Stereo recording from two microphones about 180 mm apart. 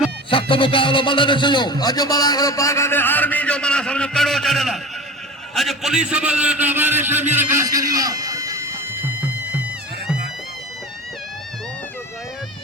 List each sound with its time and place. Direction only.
0.3 s a man's voice: 30° left (ahead or behind); by 8.7 s 20° right (ahead or behind)